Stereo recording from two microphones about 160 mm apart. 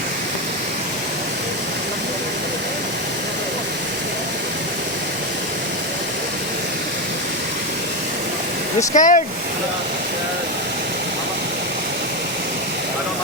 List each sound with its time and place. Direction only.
9.0 s speech: 50° left (ahead or behind)